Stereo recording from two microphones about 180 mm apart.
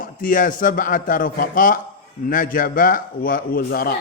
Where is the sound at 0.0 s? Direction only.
50° left (ahead or behind).